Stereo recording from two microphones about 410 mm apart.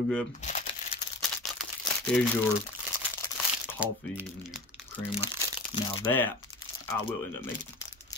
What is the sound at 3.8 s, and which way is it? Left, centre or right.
Speech, centre.